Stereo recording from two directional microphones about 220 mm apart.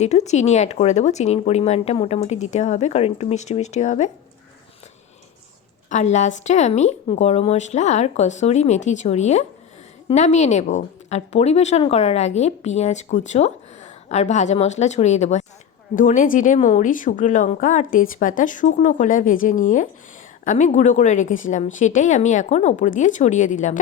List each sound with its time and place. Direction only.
0.0 s a woman's voice: 30° left (ahead or behind)
5.9 s a woman's voice: 30° left (ahead or behind)